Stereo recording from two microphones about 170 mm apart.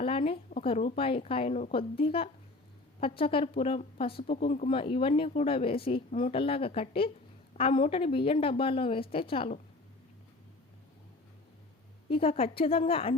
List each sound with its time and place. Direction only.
0.0 s a sound: 35° left (ahead or behind)
0.6 s speech: 40° left (ahead or behind)
12.0 s speech: 35° left (ahead or behind)